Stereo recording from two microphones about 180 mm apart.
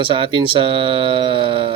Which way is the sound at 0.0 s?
30° right (ahead or behind).